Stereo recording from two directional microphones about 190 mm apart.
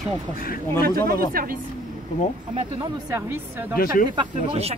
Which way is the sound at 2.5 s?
30° right (ahead or behind).